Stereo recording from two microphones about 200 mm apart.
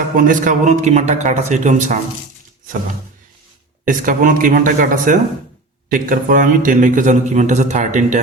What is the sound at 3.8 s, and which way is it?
A man's voice, 40° right (ahead or behind).